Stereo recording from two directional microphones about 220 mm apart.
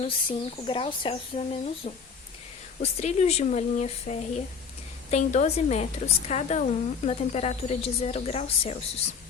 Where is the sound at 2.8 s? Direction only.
30° left (ahead or behind).